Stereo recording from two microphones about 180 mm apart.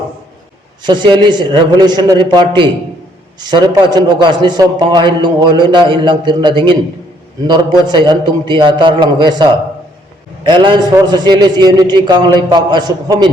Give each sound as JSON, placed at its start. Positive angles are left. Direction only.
{"t": 0.9, "sound": "a man's voice", "side_deg": -25}